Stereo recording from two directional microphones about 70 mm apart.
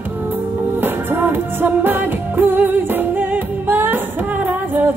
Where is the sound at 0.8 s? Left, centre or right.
Right.